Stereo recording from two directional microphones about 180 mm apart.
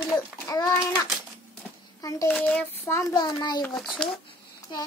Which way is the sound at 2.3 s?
5° left (ahead or behind).